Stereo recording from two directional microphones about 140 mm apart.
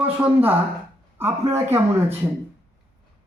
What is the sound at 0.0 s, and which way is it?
Speech, 15° right (ahead or behind).